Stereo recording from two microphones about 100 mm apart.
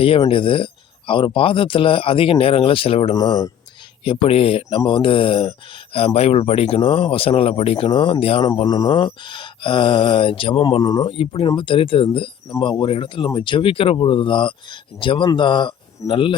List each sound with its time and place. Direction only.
0.0 s speech: 70° left (ahead or behind)
3.2 s speech: 35° left (ahead or behind)
4.0 s speech: 70° left (ahead or behind)
4.9 s speech: 55° left (ahead or behind)
6.1 s speech: 90° left; by 8.4 s 70° left (ahead or behind)
8.6 s speech: 40° left (ahead or behind)
9.0 s speech: 55° left (ahead or behind)
10.8 s speech: 45° left (ahead or behind)
11.1 s speech: 65° left (ahead or behind)